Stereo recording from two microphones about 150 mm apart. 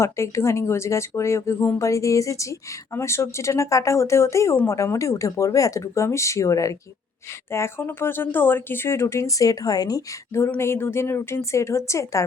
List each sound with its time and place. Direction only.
0.0 s speech: 20° left (ahead or behind)